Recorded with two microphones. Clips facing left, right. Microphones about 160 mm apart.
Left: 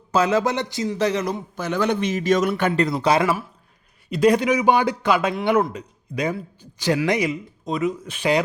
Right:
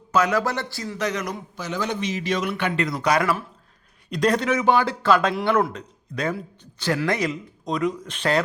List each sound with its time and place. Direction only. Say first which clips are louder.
0.1 s a man's voice: left 2 dB; 25° left (ahead or behind)
1.5 s a man's voice: left 5 dB; 55° left (ahead or behind)
2.8 s a man's voice: left 1 dB; 30° left (ahead or behind)
4.1 s a man's voice: left 4 dB; 10° left (ahead or behind)